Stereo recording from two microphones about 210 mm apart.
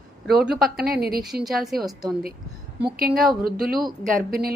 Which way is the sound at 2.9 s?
45° right (ahead or behind).